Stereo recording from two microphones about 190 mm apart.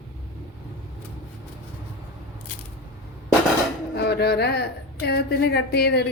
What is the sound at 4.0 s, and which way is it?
A woman's voice, 60° left (ahead or behind).